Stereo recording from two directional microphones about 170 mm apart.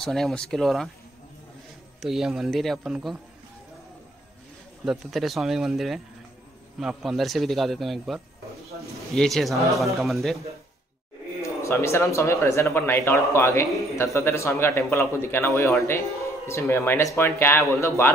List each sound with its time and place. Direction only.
0.0 s speech: centre (ahead or behind)
2.0 s speech: centre (ahead or behind)
4.8 s speech: centre (ahead or behind)
11.4 s a man's voice: 15° left (ahead or behind)